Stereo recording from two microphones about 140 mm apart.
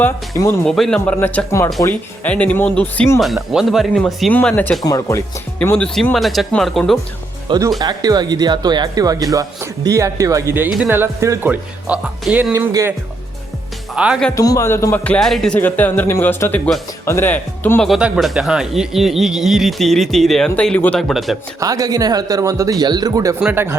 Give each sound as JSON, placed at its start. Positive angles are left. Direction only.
{"t": 0.0, "sound": "a man's voice", "side_deg": 20}
{"t": 0.6, "sound": "speech", "side_deg": 5}
{"t": 3.2, "sound": "speech", "side_deg": 0}
{"t": 4.3, "sound": "speech", "side_deg": 10}
{"t": 4.8, "sound": "a man's voice", "side_deg": 25}
{"t": 5.7, "sound": "speech", "side_deg": 5}
{"t": 7.8, "sound": "speech", "side_deg": -30}
{"t": 12.5, "sound": "speech", "side_deg": -20}
{"t": 13.9, "sound": "speech", "side_deg": -5}
{"t": 14.3, "sound": "a man's voice", "side_deg": 25}
{"t": 15.0, "sound": "speech", "side_deg": 5}
{"t": 17.8, "sound": "speech", "side_deg": 0}
{"t": 21.6, "sound": "speech", "side_deg": -25}
{"t": 23.4, "sound": "speech", "side_deg": -15}